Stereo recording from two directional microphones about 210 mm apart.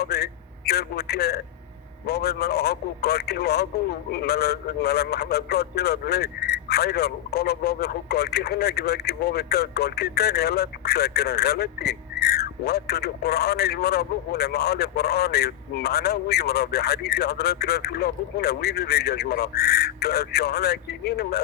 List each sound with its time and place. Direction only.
0.0 s a man's voice: 50° left (ahead or behind)